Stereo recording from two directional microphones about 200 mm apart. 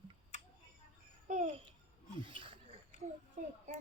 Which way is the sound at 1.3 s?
40° right (ahead or behind).